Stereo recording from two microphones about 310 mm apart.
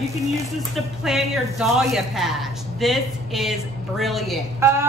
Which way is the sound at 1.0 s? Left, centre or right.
Centre.